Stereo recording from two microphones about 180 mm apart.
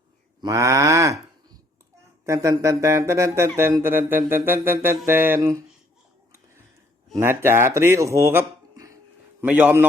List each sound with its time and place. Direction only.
0.4 s speech: 15° right (ahead or behind)
2.2 s speech: 15° right (ahead or behind)
7.2 s speech: 15° right (ahead or behind)